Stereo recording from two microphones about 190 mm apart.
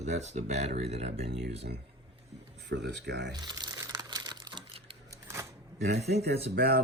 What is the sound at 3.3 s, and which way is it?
Crumpling, 20° right (ahead or behind).